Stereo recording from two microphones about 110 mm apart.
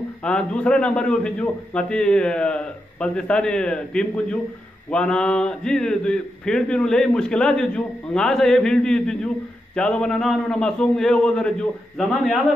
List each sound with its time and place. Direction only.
0.2 s a man's voice: 10° left (ahead or behind)